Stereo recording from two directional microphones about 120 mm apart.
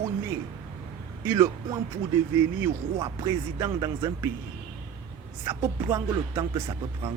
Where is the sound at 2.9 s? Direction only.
35° right (ahead or behind).